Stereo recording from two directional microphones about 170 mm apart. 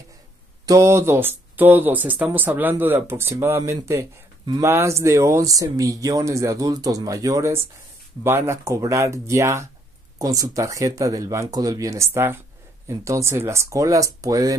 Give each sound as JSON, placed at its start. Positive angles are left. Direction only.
{"t": 0.7, "sound": "speech", "side_deg": -15}